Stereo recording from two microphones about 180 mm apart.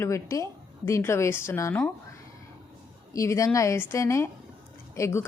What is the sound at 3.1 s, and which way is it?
A woman's voice, 15° left (ahead or behind).